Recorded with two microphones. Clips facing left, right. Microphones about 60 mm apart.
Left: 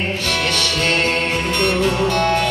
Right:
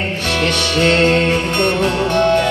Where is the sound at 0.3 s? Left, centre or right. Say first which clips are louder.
Right 5 dB; right.